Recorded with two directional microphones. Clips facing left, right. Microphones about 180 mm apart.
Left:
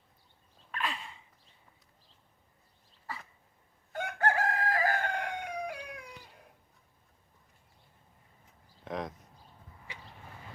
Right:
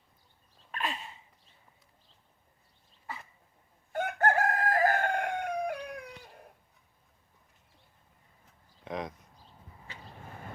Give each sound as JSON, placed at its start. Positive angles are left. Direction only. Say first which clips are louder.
{"t": 3.9, "sound": "chicken", "louder": "right 3 dB", "side_deg": -45}
{"t": 8.8, "sound": "a sound", "louder": "even", "side_deg": 0}
{"t": 9.9, "sound": "vehicle", "louder": "even", "side_deg": 15}